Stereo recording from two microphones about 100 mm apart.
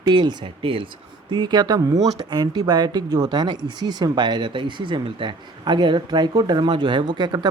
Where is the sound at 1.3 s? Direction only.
45° right (ahead or behind).